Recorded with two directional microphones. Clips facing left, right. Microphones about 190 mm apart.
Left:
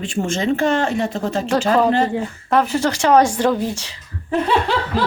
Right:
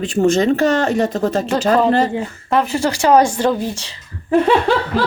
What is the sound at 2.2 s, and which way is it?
Speech, 5° right (ahead or behind).